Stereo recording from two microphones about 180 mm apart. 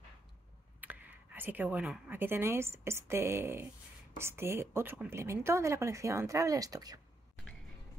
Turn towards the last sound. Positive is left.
turn(degrees=-20)  # may be behind; listen again after turning